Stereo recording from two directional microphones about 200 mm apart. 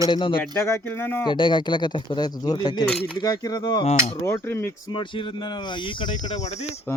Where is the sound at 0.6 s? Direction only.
15° left (ahead or behind).